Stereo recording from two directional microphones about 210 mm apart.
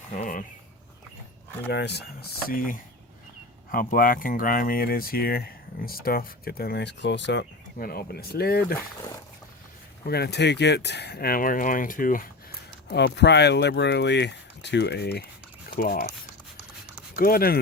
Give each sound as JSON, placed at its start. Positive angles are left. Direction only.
{"t": 0.2, "sound": "a sound", "side_deg": 40}
{"t": 1.7, "sound": "speech", "side_deg": 55}
{"t": 10.1, "sound": "speech", "side_deg": 50}
{"t": 17.2, "sound": "speech", "side_deg": 45}